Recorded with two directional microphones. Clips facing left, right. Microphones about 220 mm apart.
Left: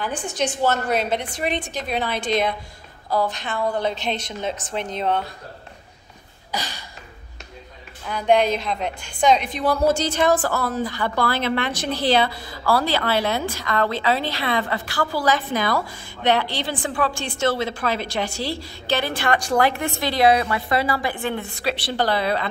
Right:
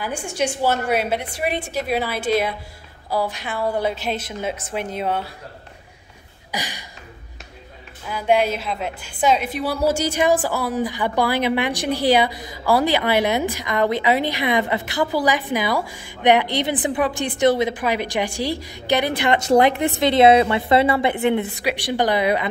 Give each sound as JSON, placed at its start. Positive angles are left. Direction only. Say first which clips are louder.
{"t": 0.0, "sound": "a woman's voice", "louder": "right 1 dB", "side_deg": -10}
{"t": 6.5, "sound": "a sound", "louder": "even", "side_deg": -15}
{"t": 8.1, "sound": "a woman's voice", "louder": "left 1 dB", "side_deg": -5}